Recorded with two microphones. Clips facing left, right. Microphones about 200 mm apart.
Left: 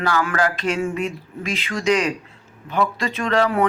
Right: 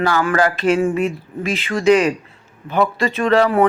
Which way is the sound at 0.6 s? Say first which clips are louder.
Right 6 dB; 55° right (ahead or behind).